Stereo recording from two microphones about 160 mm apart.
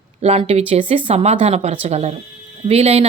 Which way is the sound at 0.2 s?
40° right (ahead or behind).